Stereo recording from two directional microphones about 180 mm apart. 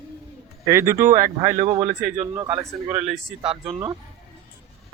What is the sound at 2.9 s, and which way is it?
Speech, centre (ahead or behind).